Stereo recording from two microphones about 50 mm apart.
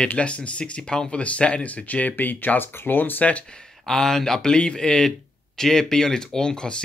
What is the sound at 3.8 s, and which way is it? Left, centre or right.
Speech, centre.